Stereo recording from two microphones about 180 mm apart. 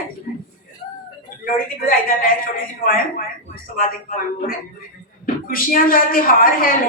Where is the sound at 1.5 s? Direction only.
50° left (ahead or behind).